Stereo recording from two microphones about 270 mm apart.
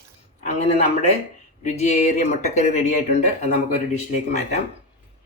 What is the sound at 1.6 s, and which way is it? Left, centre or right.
Speech, left.